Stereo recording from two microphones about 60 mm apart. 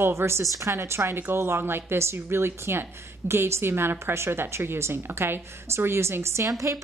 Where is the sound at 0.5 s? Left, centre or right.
Right.